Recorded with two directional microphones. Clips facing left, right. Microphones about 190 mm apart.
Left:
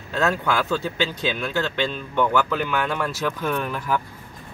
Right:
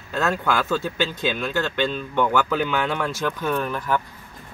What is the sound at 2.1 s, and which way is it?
Speech, 5° right (ahead or behind).